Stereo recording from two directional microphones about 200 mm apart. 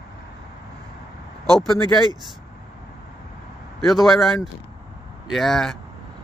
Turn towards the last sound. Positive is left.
turn(degrees=0)  # may be behind; listen again after turning